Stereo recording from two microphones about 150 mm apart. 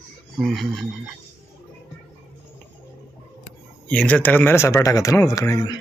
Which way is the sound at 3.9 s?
10° left (ahead or behind).